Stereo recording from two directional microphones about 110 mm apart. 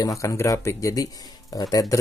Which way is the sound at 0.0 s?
30° left (ahead or behind).